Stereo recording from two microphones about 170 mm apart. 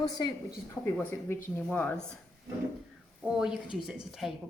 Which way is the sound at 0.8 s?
10° left (ahead or behind).